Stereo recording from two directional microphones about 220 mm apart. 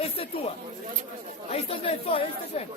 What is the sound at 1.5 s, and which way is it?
Speech, 25° left (ahead or behind).